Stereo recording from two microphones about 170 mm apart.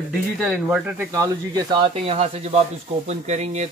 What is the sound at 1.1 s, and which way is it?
Speech, 20° right (ahead or behind).